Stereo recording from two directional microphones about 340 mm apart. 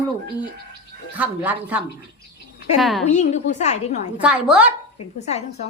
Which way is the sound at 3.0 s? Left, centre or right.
Centre.